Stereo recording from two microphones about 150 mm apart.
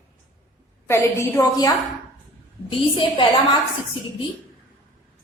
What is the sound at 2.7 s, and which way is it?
Speech, 35° left (ahead or behind).